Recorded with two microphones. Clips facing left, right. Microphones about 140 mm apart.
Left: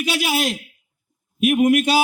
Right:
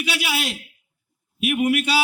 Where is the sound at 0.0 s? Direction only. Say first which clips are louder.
Left 5 dB; 45° left (ahead or behind).